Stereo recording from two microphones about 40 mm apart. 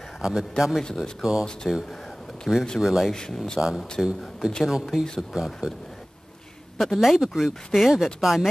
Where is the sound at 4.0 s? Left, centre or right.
Centre.